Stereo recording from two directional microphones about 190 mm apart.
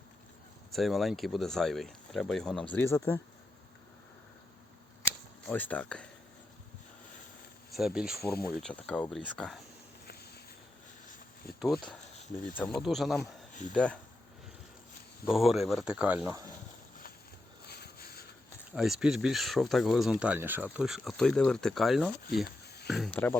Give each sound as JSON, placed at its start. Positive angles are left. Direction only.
{"t": 0.7, "sound": "speech", "side_deg": 0}
{"t": 2.7, "sound": "speech", "side_deg": 15}
{"t": 5.0, "sound": "a sound", "side_deg": 10}
{"t": 7.7, "sound": "speech", "side_deg": 0}
{"t": 11.6, "sound": "speech", "side_deg": 5}
{"t": 15.3, "sound": "speech", "side_deg": 0}
{"t": 17.7, "sound": "a sound", "side_deg": 55}
{"t": 18.7, "sound": "speech", "side_deg": 0}
{"t": 22.6, "sound": "a sound", "side_deg": 55}
{"t": 22.9, "sound": "speech", "side_deg": 0}